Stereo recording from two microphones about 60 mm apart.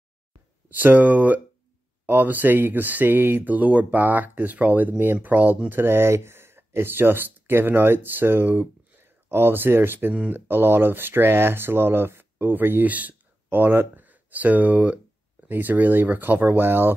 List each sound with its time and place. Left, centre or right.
0.7 s speech: right